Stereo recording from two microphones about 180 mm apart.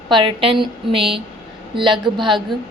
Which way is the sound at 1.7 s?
25° right (ahead or behind).